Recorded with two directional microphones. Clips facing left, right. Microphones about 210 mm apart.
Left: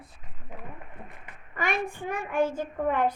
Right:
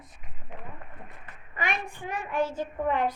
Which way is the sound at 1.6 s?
50° left (ahead or behind).